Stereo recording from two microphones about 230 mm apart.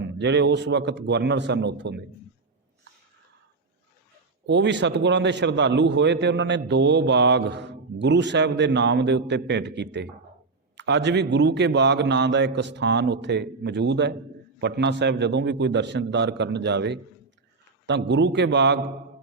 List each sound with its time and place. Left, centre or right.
0.0 s a man's voice: right
4.4 s a man's voice: right